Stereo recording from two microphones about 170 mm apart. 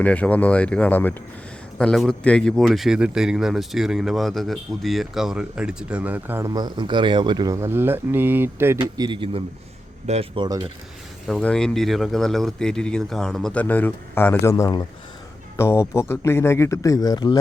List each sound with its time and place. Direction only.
0.0 s a man's voice: 10° left (ahead or behind); by 6.5 s 10° right (ahead or behind)
6.5 s speech: 25° right (ahead or behind)
8.8 s speech: 30° right (ahead or behind)
11.3 s a man's voice: 5° left (ahead or behind); by 17.4 s 25° left (ahead or behind)